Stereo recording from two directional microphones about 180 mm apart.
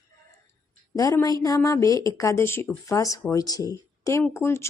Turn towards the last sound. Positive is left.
turn(degrees=15)  # may be behind; listen again after turning